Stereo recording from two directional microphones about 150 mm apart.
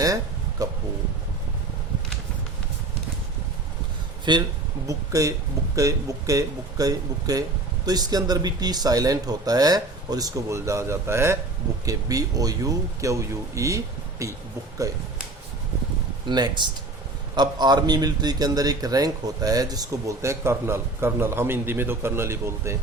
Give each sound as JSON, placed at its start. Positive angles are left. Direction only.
{"t": 0.6, "sound": "a man's voice", "side_deg": -25}
{"t": 4.3, "sound": "a man's voice", "side_deg": -30}
{"t": 16.2, "sound": "a man's voice", "side_deg": -30}